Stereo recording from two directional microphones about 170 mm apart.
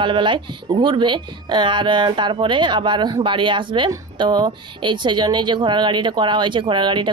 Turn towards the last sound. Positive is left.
turn(degrees=-25)  # may be behind; listen again after turning